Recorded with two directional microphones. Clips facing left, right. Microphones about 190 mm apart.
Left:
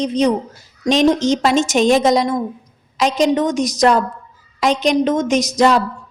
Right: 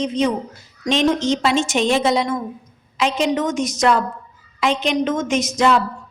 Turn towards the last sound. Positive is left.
turn(degrees=40)  # may be behind; listen again after turning